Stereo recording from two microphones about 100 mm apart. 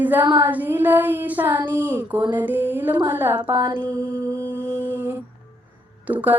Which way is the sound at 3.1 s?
20° right (ahead or behind).